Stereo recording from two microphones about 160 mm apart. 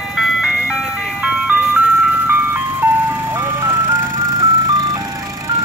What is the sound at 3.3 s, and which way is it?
Ice cream truck, 15° right (ahead or behind).